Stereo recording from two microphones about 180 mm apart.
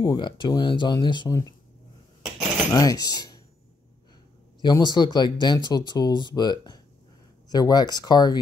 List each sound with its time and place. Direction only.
0.0 s speech: 25° left (ahead or behind)
2.7 s speech: 20° left (ahead or behind)
4.6 s speech: 25° left (ahead or behind)